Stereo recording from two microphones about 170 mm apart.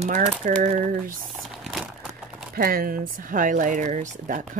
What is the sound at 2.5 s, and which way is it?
Speech, 60° right (ahead or behind).